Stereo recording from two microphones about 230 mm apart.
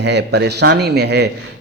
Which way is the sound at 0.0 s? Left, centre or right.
Right.